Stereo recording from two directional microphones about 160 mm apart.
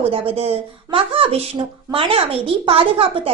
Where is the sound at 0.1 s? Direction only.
35° right (ahead or behind).